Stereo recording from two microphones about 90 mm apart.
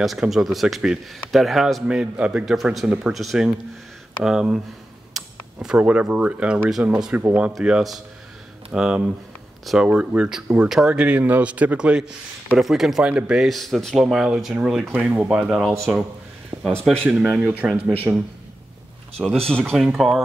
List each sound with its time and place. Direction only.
0.0 s speech: centre (ahead or behind)
16.5 s a sound: 20° right (ahead or behind)
17.1 s speech: 15° right (ahead or behind)
19.1 s speech: 10° left (ahead or behind)